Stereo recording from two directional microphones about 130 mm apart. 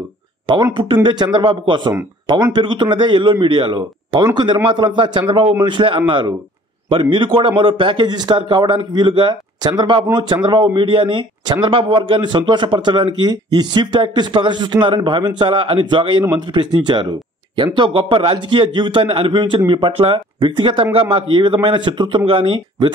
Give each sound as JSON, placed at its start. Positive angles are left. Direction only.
{"t": 1.0, "sound": "speech", "side_deg": -35}